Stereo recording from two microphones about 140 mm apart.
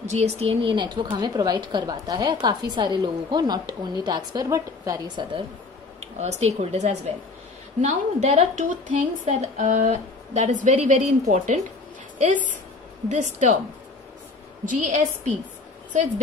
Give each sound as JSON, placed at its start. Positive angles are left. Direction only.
{"t": 0.0, "sound": "a woman's voice", "side_deg": -50}
{"t": 6.1, "sound": "a woman's voice", "side_deg": -50}
{"t": 14.6, "sound": "a woman's voice", "side_deg": -75}